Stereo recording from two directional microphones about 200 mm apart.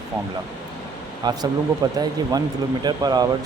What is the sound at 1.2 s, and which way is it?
Speech, 20° right (ahead or behind).